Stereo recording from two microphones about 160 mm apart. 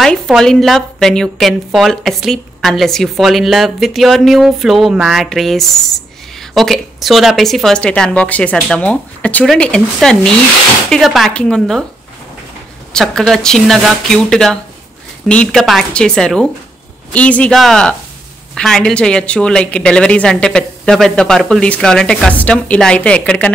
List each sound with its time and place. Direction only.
0.0 s a woman's voice: centre (ahead or behind)
12.9 s a woman's voice: centre (ahead or behind)